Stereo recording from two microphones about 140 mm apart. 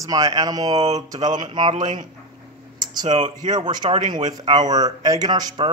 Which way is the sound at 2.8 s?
30° right (ahead or behind).